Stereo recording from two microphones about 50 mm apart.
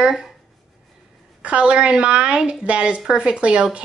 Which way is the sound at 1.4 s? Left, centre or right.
Right.